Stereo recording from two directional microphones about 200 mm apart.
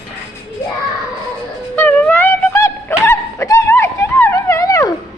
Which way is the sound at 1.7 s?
10° left (ahead or behind).